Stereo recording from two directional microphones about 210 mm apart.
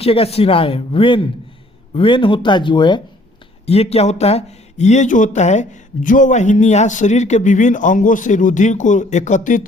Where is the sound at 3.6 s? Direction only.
30° left (ahead or behind).